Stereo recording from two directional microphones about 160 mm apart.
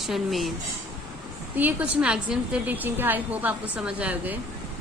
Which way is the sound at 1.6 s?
10° right (ahead or behind).